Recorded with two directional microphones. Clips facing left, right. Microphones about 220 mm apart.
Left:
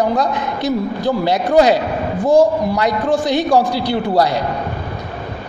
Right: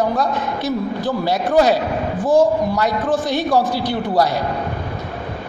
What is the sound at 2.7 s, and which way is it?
A man's voice, 15° left (ahead or behind).